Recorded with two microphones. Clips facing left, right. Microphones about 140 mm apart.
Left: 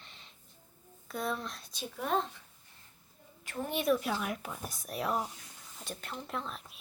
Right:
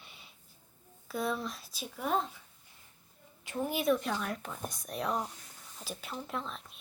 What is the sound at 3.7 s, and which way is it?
Speech, centre (ahead or behind).